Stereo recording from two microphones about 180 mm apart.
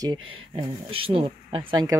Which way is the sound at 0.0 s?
25° right (ahead or behind).